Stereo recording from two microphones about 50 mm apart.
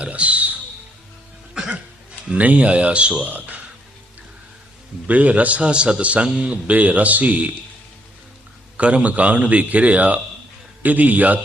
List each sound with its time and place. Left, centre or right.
0.0 s a sound: right
1.6 s a sound: centre
2.3 s a man's voice: right
3.3 s music: right
5.0 s a man's voice: right
8.8 s a man's voice: right